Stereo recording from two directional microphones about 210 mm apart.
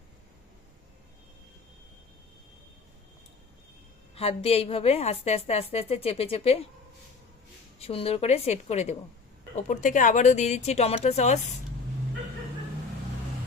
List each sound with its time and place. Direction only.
4.1 s a woman's voice: 30° left (ahead or behind)
7.8 s a woman's voice: 25° left (ahead or behind)